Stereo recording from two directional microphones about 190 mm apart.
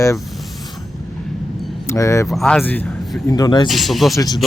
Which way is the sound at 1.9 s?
15° left (ahead or behind).